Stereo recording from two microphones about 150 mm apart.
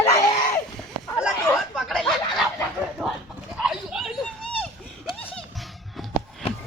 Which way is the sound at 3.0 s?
5° right (ahead or behind).